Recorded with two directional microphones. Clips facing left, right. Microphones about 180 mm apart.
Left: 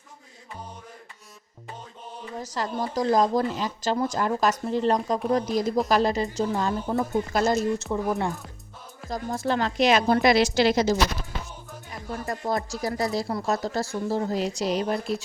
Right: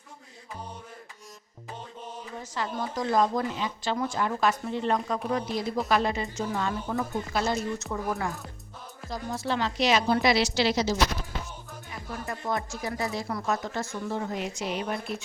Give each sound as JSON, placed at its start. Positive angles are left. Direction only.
{"t": 2.4, "sound": "speech", "side_deg": 40}
{"t": 8.1, "sound": "speech", "side_deg": 20}
{"t": 9.0, "sound": "speech", "side_deg": 45}
{"t": 12.2, "sound": "speech", "side_deg": 35}